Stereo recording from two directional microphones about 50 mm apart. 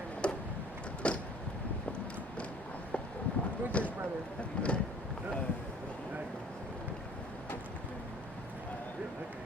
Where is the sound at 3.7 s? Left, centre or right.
Left.